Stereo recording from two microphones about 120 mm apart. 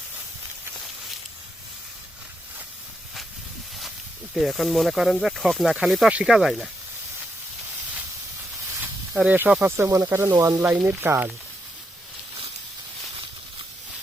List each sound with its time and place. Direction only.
4.4 s speech: centre (ahead or behind)
9.1 s speech: 15° right (ahead or behind)